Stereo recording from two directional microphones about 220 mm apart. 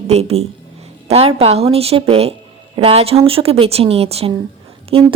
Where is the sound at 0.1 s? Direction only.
30° right (ahead or behind).